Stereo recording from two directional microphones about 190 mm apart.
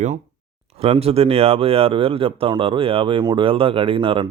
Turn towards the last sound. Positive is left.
turn(degrees=-25)  # may be behind; listen again after turning